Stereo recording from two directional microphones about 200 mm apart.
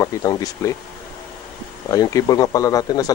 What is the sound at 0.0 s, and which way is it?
Speech, 20° left (ahead or behind).